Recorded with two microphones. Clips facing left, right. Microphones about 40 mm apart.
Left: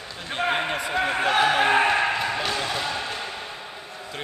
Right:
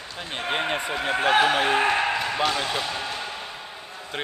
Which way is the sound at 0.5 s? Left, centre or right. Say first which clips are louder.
Right 4 dB; centre.